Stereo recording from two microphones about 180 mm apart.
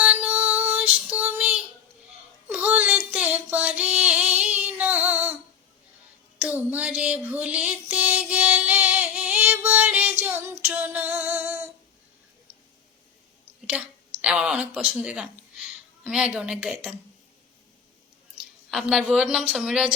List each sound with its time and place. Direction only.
0.0 s female singing: 5° right (ahead or behind)
2.5 s music: 5° right (ahead or behind)
6.4 s music: 10° right (ahead or behind)
13.7 s a sound: 5° right (ahead or behind)
16.0 s a woman's voice: 5° right (ahead or behind)
18.7 s a woman's voice: centre (ahead or behind)